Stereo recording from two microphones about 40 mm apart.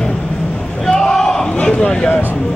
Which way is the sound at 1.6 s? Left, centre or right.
Left.